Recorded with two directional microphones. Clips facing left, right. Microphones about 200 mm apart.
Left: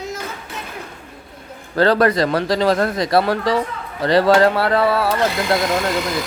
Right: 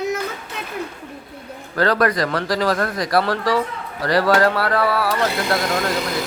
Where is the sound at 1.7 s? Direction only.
30° left (ahead or behind).